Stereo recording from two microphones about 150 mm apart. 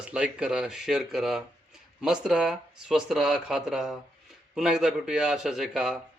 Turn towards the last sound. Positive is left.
turn(degrees=0)  # may be behind; listen again after turning